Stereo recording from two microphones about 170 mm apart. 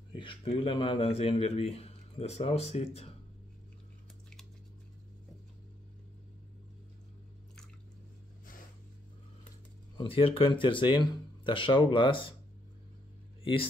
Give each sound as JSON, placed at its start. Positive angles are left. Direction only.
{"t": 0.1, "sound": "a man's voice", "side_deg": 30}
{"t": 9.9, "sound": "speech", "side_deg": 30}
{"t": 13.4, "sound": "a sound", "side_deg": 30}